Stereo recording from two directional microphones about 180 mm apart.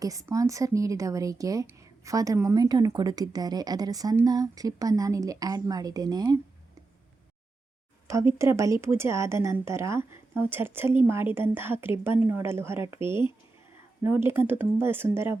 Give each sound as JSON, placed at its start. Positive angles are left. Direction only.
{"t": 0.0, "sound": "speech", "side_deg": -20}
{"t": 8.0, "sound": "speech", "side_deg": -15}